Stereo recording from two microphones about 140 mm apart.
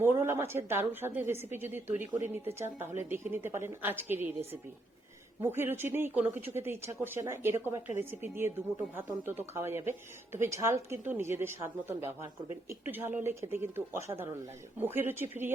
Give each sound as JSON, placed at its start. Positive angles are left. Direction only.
{"t": 0.0, "sound": "a woman's voice", "side_deg": -20}